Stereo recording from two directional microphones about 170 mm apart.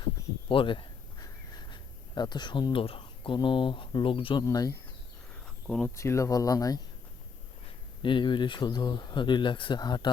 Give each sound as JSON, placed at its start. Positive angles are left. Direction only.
{"t": 0.4, "sound": "a sound", "side_deg": 30}
{"t": 4.4, "sound": "speech", "side_deg": 20}
{"t": 5.3, "sound": "cricket", "side_deg": 5}
{"t": 6.0, "sound": "speech", "side_deg": 15}
{"t": 8.0, "sound": "speech", "side_deg": 30}